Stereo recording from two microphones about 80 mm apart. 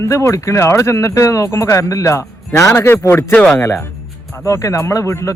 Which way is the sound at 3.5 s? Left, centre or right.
Left.